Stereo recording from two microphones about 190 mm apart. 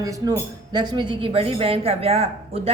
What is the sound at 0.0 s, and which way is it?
Speech, 20° right (ahead or behind).